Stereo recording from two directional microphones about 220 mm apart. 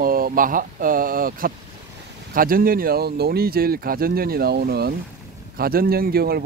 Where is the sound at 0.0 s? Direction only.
40° right (ahead or behind).